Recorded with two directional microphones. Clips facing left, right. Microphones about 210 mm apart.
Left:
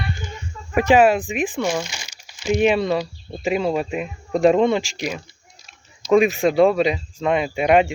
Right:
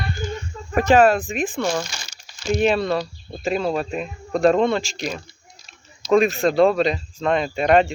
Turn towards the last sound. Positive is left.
turn(degrees=10)  # may be behind; listen again after turning